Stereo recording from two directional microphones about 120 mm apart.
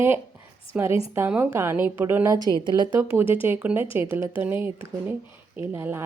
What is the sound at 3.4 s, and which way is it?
A woman's voice, 15° right (ahead or behind).